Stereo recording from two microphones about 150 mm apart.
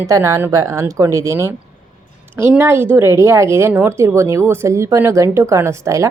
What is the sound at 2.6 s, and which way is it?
A woman's voice, 15° right (ahead or behind).